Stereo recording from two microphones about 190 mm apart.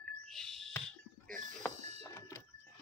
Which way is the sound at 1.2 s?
45° right (ahead or behind).